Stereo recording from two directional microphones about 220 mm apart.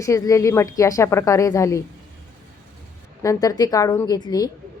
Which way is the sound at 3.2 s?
15° left (ahead or behind).